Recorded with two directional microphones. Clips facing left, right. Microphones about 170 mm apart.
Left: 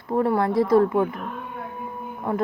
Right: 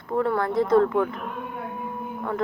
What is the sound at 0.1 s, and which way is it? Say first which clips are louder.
Speech: left 2 dB; 25° left (ahead or behind).